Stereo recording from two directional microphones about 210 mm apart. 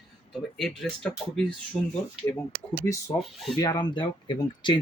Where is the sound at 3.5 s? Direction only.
20° left (ahead or behind).